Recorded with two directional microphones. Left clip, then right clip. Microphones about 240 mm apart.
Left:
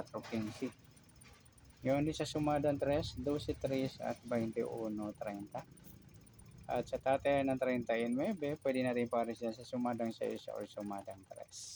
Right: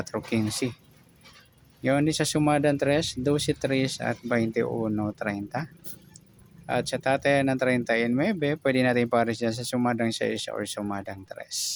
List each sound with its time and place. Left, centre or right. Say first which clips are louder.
0.1 s speech: right 15 dB; right
1.8 s speech: right 11 dB; right
6.7 s speech: right 9 dB; right